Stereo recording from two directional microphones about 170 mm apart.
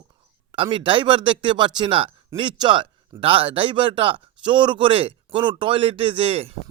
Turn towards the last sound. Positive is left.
turn(degrees=-35)  # may be behind; listen again after turning